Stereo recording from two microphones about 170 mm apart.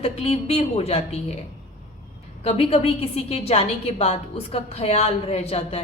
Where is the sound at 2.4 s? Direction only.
35° left (ahead or behind).